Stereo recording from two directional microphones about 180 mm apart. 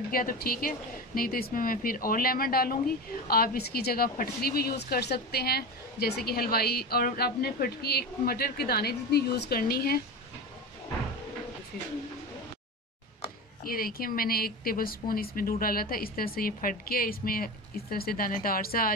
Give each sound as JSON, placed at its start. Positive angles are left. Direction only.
{"t": 0.1, "sound": "speech", "side_deg": 55}
{"t": 13.7, "sound": "speech", "side_deg": 55}